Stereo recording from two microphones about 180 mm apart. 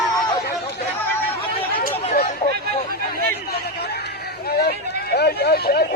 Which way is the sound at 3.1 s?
60° left (ahead or behind).